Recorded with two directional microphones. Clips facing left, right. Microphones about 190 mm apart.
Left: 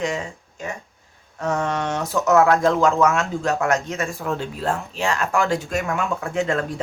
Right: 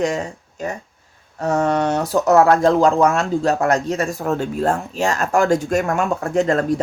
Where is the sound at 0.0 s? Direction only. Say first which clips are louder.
Right 5 dB; 40° right (ahead or behind).